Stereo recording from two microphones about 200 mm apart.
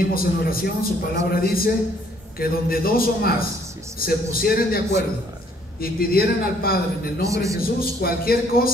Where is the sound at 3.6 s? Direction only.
15° right (ahead or behind).